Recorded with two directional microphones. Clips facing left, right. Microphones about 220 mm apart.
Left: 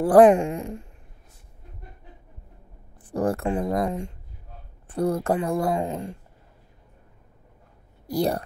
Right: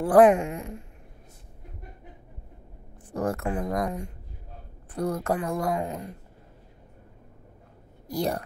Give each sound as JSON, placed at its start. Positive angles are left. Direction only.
{"t": 0.0, "sound": "a woman's voice", "side_deg": 35}
{"t": 3.1, "sound": "speech", "side_deg": 30}
{"t": 8.1, "sound": "a woman's voice", "side_deg": 35}